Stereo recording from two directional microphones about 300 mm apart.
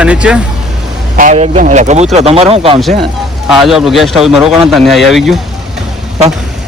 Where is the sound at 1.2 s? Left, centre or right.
Right.